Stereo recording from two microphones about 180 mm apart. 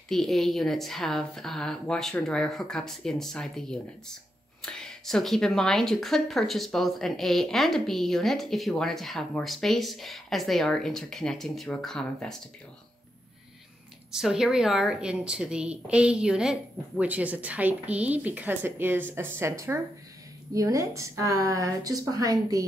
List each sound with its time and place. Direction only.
0.1 s speech: centre (ahead or behind)
14.1 s a woman's voice: 5° right (ahead or behind); by 22.7 s 20° right (ahead or behind)